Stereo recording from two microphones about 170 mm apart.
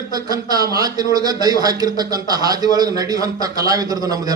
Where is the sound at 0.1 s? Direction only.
20° right (ahead or behind).